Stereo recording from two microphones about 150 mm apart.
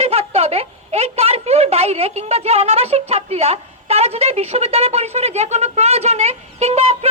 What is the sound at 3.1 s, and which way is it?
A woman's voice, 45° right (ahead or behind).